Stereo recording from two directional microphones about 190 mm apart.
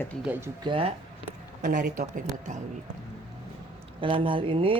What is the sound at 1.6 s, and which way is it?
Speech, 45° right (ahead or behind).